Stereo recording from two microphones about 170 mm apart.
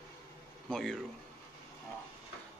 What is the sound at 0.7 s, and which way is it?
Speech, 5° left (ahead or behind).